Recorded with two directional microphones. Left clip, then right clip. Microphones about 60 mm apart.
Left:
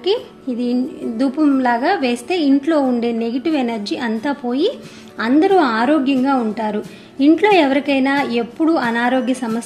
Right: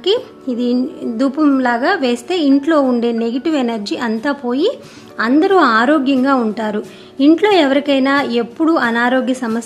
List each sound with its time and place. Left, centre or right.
0.0 s speech: right
1.6 s a woman's voice: right
5.5 s a woman's voice: right
8.9 s a woman's voice: right